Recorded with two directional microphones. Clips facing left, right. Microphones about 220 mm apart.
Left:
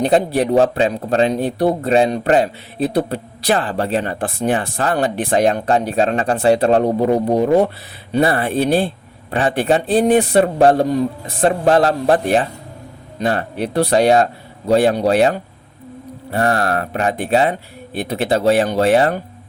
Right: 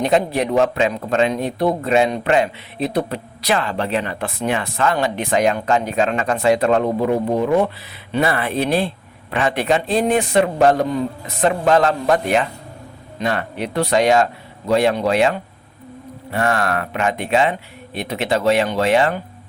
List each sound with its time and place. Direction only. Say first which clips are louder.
0.0 s speech: left 2 dB; 35° left (ahead or behind)